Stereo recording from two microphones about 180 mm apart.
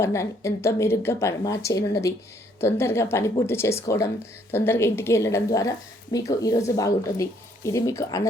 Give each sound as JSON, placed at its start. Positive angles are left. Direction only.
{"t": 0.0, "sound": "a woman's voice", "side_deg": 15}